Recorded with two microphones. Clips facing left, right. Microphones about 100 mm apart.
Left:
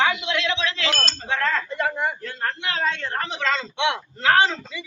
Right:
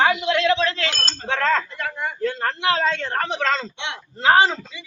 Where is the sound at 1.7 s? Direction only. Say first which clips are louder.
Left 4 dB; 20° left (ahead or behind).